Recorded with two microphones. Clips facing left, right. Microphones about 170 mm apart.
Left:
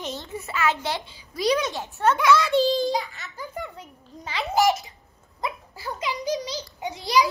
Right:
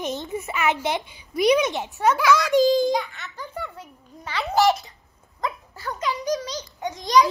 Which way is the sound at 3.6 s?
15° left (ahead or behind).